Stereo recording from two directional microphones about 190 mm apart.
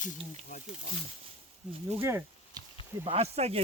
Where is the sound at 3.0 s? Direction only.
30° right (ahead or behind).